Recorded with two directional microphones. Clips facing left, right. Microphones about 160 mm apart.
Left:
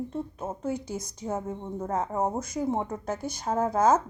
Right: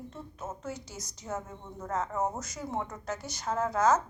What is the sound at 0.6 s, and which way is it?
Speech, 55° left (ahead or behind).